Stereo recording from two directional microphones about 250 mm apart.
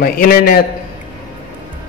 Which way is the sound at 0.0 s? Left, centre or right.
Left.